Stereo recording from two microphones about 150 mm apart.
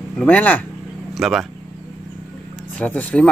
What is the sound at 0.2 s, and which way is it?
Speech, 10° left (ahead or behind).